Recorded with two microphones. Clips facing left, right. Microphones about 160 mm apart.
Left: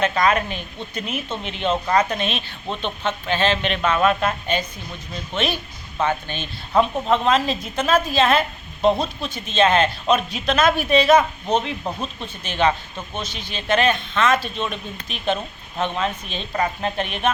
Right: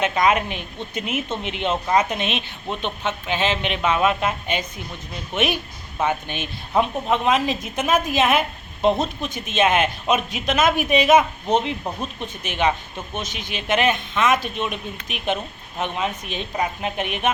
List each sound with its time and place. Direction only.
0.0 s a woman's voice: 15° right (ahead or behind)